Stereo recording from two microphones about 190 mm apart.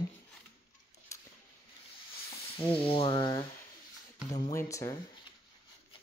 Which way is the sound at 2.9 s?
25° left (ahead or behind).